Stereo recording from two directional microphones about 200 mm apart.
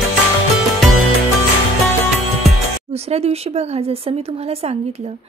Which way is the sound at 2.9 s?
30° right (ahead or behind).